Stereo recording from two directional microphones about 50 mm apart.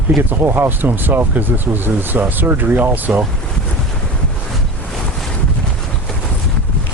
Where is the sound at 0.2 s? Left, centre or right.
Right.